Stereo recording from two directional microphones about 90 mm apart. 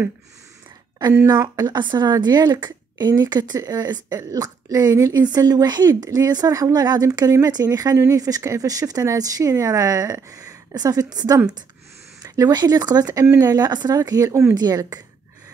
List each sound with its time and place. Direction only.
1.2 s speech: 50° right (ahead or behind)
14.5 s speech: 50° right (ahead or behind)